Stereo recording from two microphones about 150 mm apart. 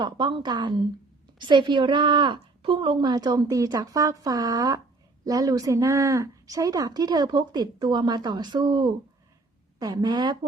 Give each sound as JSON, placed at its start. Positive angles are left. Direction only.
{"t": 0.0, "sound": "a woman's voice", "side_deg": -30}